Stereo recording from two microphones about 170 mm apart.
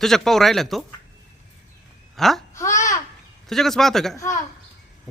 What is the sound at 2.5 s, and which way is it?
Babbling, 15° left (ahead or behind).